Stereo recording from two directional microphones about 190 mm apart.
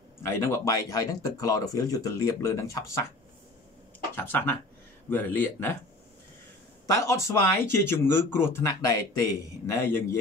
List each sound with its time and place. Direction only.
0.3 s speech: 15° left (ahead or behind)
4.1 s speech: 10° left (ahead or behind)
6.9 s speech: 15° left (ahead or behind)